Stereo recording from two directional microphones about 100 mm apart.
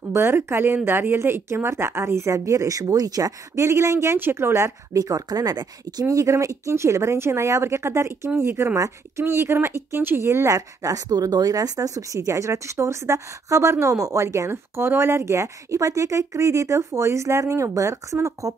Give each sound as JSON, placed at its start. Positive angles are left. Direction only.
{"t": 0.1, "sound": "speech", "side_deg": -25}